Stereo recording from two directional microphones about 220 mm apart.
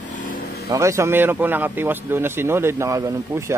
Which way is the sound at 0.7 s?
15° right (ahead or behind).